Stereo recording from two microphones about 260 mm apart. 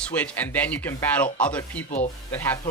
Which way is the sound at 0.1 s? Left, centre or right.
Centre.